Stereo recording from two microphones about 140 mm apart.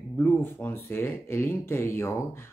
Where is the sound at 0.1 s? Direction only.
15° left (ahead or behind).